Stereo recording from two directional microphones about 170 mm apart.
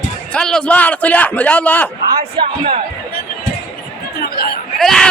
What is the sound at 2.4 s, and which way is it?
Speech, 30° right (ahead or behind).